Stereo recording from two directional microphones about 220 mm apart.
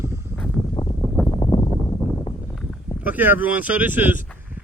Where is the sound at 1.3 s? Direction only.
20° left (ahead or behind).